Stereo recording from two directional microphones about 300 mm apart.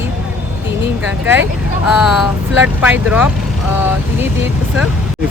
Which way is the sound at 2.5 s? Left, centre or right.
Centre.